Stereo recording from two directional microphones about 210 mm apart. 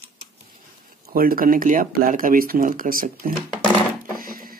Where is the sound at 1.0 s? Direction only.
45° right (ahead or behind).